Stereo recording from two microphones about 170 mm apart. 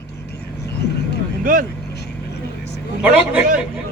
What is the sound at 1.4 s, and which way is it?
Speech, 55° right (ahead or behind).